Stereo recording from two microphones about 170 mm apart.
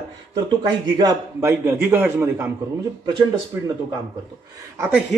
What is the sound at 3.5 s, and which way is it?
Speech, 20° right (ahead or behind).